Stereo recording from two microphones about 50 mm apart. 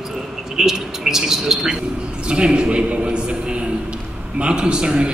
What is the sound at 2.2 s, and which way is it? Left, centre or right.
A man's voice, right.